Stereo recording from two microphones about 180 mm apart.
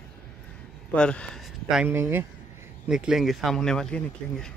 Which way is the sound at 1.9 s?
15° right (ahead or behind).